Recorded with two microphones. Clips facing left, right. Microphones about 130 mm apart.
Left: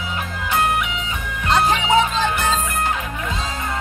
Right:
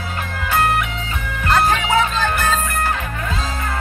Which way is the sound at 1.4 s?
20° left (ahead or behind).